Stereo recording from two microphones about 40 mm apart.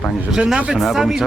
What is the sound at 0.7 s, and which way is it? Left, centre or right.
Speech, centre.